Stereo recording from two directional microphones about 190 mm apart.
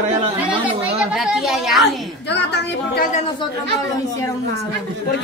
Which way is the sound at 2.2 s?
65° left (ahead or behind).